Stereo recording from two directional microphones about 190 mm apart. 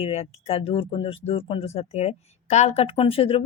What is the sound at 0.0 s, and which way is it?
Speech, 35° left (ahead or behind).